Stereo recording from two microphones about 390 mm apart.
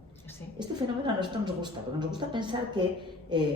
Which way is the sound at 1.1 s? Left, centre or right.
Centre.